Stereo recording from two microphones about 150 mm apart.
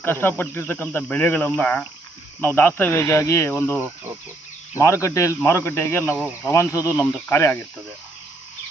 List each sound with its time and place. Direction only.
0.0 s speech: 15° left (ahead or behind)